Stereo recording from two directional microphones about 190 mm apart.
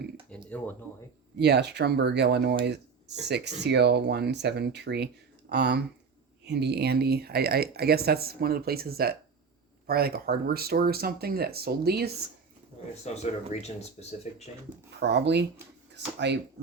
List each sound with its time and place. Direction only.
0.3 s a sound: 10° left (ahead or behind)
1.4 s speech: 60° right (ahead or behind)
13.1 s speech: 35° left (ahead or behind)
14.8 s speech: 60° right (ahead or behind)